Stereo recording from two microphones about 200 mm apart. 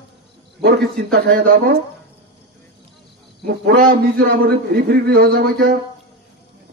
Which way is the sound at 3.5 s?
50° right (ahead or behind).